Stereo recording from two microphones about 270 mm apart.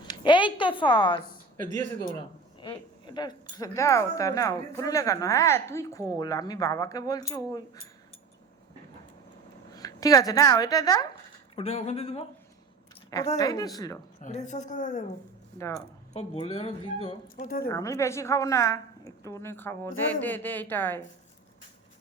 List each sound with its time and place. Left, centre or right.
0.1 s a sound: centre
1.7 s speech: centre
9.7 s speech: centre
14.2 s speech: left
15.5 s speech: centre
16.1 s speech: left
17.7 s speech: centre